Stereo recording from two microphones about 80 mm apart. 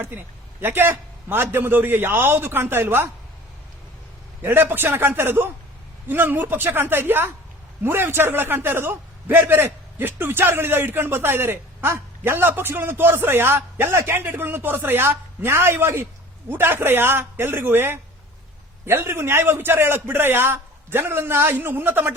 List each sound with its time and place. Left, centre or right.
0.6 s a man's voice: right
4.4 s a man's voice: right